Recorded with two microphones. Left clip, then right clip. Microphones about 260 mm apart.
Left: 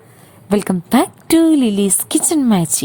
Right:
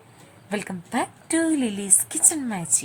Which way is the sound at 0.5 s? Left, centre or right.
Left.